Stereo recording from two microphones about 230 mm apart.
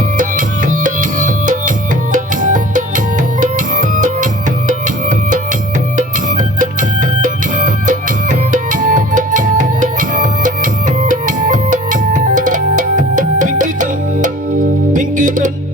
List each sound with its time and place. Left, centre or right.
0.2 s music: right
6.0 s music: right